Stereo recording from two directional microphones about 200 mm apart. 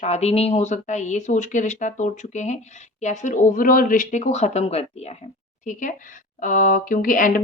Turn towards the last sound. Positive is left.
turn(degrees=45)  # may be behind; listen again after turning